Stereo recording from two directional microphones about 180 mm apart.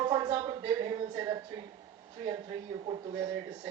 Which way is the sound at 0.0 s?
25° right (ahead or behind).